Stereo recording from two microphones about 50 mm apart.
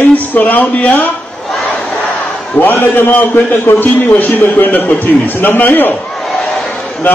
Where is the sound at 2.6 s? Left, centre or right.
Left.